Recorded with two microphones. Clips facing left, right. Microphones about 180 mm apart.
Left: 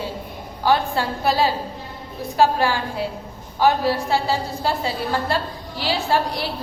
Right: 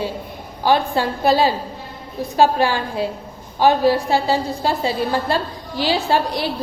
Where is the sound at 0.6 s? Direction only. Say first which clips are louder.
Right 2 dB; 20° right (ahead or behind).